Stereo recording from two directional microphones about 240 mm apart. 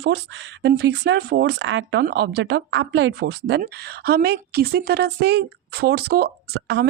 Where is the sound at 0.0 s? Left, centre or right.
Right.